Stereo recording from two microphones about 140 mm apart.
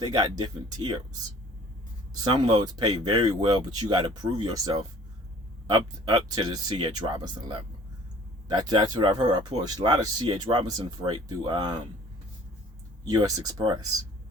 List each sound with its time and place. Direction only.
0.0 s speech: 30° right (ahead or behind)
2.2 s speech: 30° right (ahead or behind)
13.1 s speech: 25° right (ahead or behind)